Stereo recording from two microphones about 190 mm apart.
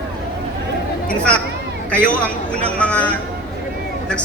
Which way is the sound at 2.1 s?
5° left (ahead or behind).